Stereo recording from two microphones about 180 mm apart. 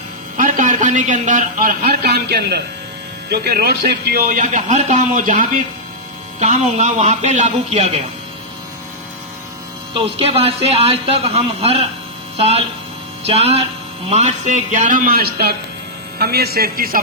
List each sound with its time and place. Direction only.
0.3 s a man's voice: 45° right (ahead or behind)
9.9 s a man's voice: 35° right (ahead or behind); by 17.0 s 55° right (ahead or behind)